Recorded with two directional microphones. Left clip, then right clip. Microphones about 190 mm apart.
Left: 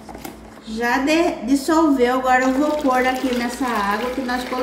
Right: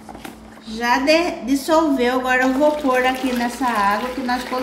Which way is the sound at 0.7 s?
35° right (ahead or behind).